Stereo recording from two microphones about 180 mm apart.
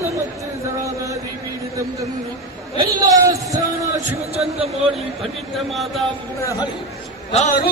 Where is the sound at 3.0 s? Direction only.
20° right (ahead or behind).